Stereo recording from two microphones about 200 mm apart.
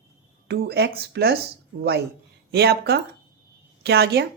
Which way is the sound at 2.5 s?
55° right (ahead or behind).